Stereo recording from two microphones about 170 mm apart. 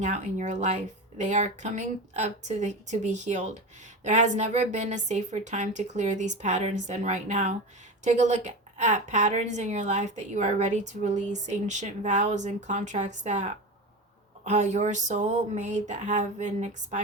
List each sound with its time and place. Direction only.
0.0 s a woman's voice: 45° right (ahead or behind)